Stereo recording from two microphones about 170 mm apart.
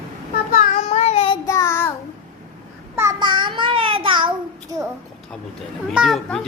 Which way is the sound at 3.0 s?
20° right (ahead or behind).